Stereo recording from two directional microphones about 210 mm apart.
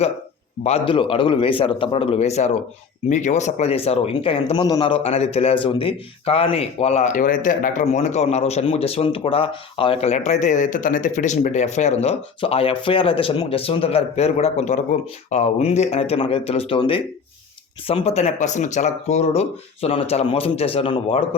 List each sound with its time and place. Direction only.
0.6 s speech: 25° left (ahead or behind)